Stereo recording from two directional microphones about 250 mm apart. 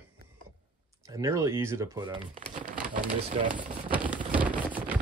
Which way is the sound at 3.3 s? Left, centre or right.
Right.